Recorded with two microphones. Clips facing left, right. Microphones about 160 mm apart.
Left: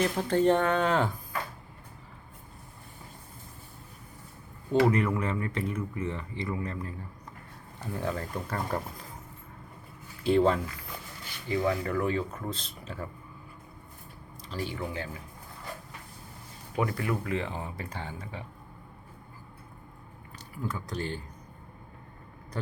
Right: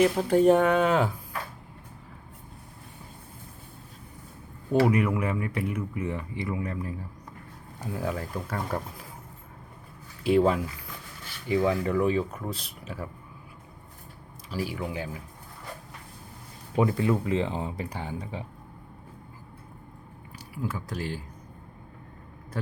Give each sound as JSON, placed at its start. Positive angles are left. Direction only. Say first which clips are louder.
{"t": 0.0, "sound": "speech", "louder": "right 5 dB", "side_deg": -10}
{"t": 4.9, "sound": "speech", "louder": "right 2 dB", "side_deg": -10}
{"t": 10.2, "sound": "speech", "louder": "right 2 dB", "side_deg": -5}
{"t": 11.4, "sound": "speech", "louder": "right 4 dB", "side_deg": -20}
{"t": 14.5, "sound": "speech", "louder": "right 3 dB", "side_deg": -5}
{"t": 16.7, "sound": "speech", "louder": "right 6 dB", "side_deg": -20}
{"t": 20.5, "sound": "speech", "louder": "right 2 dB", "side_deg": -5}